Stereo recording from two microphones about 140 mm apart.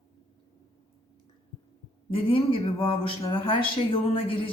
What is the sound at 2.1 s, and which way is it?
Speech, 45° left (ahead or behind).